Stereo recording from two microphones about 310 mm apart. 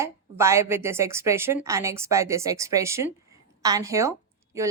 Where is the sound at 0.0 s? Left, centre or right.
Centre.